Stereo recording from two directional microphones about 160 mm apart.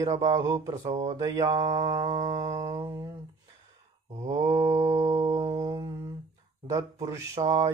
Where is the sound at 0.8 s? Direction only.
40° right (ahead or behind).